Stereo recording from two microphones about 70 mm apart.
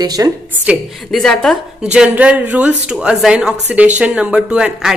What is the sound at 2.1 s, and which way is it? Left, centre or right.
Speech, right.